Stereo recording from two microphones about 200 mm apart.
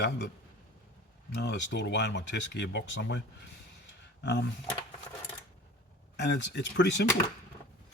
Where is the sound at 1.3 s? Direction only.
55° left (ahead or behind).